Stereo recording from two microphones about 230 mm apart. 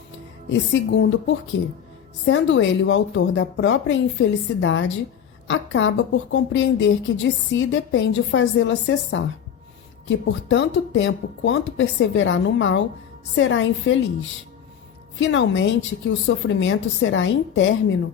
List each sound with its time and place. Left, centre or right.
0.7 s a woman's voice: left